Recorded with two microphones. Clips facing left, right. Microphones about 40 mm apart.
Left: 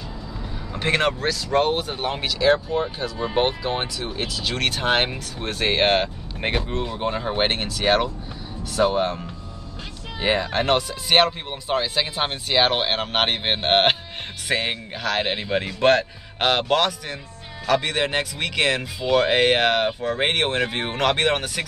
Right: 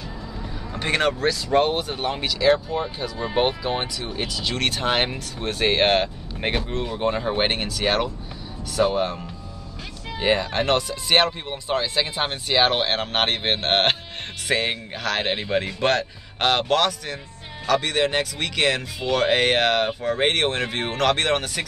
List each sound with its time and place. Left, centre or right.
0.7 s speech: centre